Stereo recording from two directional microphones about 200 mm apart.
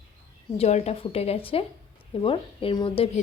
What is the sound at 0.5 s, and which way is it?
A woman's voice, 30° left (ahead or behind).